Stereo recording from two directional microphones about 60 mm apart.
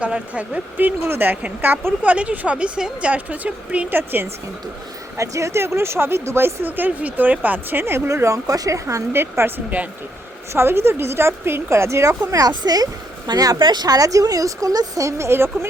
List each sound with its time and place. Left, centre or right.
0.0 s speech: right
1.0 s speech: right
5.1 s speech: right
8.4 s speech: right
9.1 s speech: right
10.5 s speech: right